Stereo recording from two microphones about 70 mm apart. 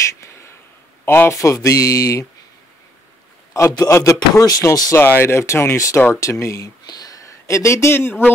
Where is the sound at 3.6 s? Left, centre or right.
Left.